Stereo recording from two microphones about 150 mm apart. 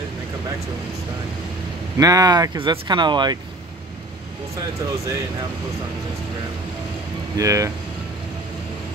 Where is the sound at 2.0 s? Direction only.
25° right (ahead or behind).